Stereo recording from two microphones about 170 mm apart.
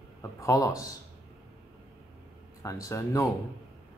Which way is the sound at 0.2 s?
20° left (ahead or behind).